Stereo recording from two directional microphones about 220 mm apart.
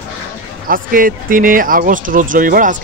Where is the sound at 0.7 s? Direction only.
40° right (ahead or behind).